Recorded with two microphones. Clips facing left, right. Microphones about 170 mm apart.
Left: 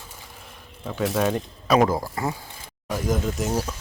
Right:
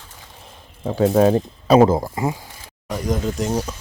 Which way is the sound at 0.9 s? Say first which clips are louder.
Right 8 dB; 35° right (ahead or behind).